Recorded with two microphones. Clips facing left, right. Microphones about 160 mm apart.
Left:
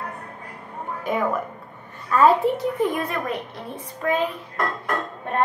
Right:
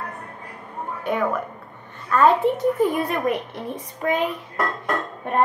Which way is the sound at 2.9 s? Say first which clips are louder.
Right 4 dB; 15° right (ahead or behind).